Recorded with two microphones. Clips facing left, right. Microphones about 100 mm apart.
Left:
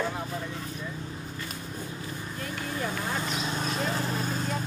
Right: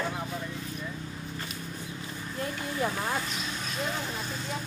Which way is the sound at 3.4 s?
40° left (ahead or behind).